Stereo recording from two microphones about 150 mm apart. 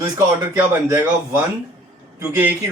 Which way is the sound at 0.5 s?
10° right (ahead or behind).